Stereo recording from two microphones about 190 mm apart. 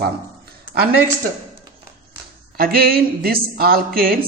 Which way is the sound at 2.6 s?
50° right (ahead or behind).